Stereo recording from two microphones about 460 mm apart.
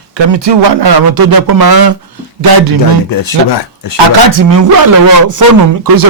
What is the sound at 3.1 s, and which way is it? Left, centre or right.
Speech, left.